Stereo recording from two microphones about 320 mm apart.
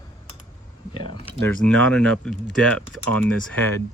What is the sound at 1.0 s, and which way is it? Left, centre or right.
Speech, centre.